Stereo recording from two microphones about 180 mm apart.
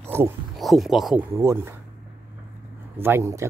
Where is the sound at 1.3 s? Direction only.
15° right (ahead or behind).